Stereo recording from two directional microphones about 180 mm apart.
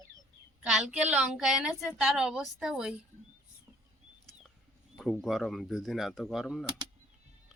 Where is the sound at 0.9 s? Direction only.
5° right (ahead or behind).